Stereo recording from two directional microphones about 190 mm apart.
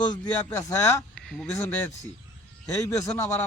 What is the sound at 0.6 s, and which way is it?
Speech, 15° left (ahead or behind).